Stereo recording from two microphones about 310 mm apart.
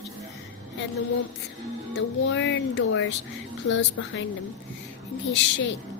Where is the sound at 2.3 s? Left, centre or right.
Left.